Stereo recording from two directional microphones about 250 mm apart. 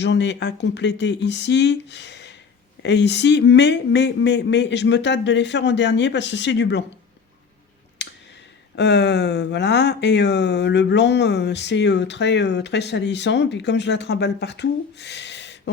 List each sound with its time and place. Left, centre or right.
0.0 s speech: left
8.0 s a sound: left
8.7 s speech: left